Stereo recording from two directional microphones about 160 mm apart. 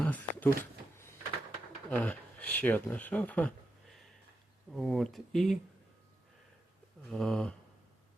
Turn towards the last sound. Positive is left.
turn(degrees=5)  # may be behind; listen again after turning